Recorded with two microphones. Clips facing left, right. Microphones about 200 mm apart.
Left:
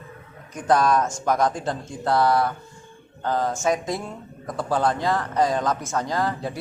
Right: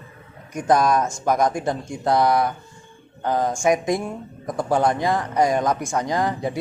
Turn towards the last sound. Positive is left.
turn(degrees=-15)  # may be behind; listen again after turning